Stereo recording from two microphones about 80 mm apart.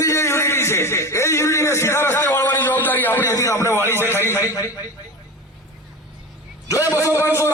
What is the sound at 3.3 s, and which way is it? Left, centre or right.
Speech, left.